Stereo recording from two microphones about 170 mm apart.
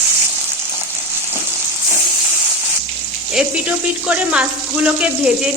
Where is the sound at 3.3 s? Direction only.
5° right (ahead or behind).